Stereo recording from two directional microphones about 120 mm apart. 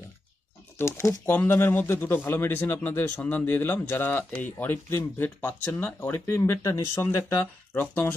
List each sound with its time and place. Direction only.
0.7 s speech: 20° left (ahead or behind)